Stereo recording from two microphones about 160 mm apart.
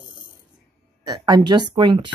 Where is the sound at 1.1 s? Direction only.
25° right (ahead or behind).